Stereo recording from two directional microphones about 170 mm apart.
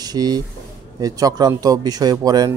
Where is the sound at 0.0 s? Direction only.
25° right (ahead or behind).